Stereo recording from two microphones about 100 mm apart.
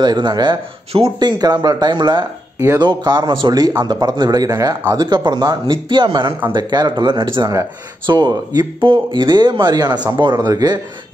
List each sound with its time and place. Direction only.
0.0 s speech: 45° right (ahead or behind)
10.4 s speech: 40° right (ahead or behind)